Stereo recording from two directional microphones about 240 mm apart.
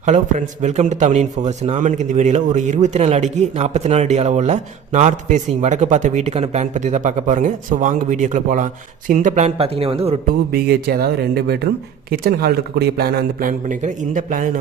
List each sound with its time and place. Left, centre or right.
0.0 s a man's voice: right
10.5 s a man's voice: right